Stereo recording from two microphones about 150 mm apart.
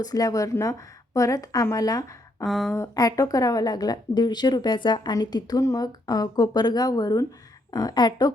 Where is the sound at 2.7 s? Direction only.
20° left (ahead or behind).